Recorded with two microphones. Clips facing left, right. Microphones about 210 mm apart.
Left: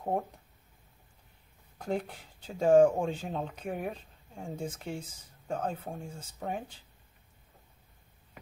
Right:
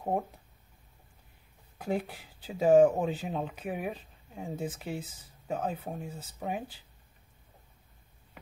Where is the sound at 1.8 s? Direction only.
5° right (ahead or behind).